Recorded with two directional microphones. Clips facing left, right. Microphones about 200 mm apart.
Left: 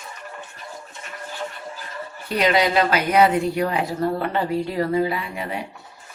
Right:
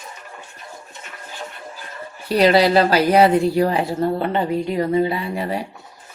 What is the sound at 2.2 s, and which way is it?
Speech, 35° right (ahead or behind).